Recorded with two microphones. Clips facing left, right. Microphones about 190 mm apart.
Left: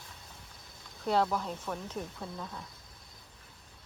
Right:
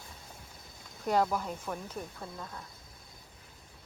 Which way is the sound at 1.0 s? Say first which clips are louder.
Even; 10° right (ahead or behind).